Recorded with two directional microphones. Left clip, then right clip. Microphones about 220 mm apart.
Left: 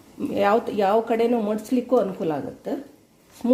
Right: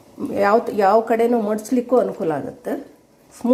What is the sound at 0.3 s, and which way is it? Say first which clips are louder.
Speech: right 4 dB; 5° left (ahead or behind).